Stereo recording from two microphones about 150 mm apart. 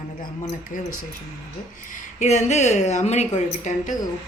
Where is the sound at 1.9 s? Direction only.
50° left (ahead or behind).